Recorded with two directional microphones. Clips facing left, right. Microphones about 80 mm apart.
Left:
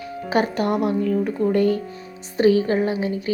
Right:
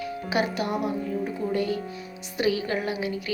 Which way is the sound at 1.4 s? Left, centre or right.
Left.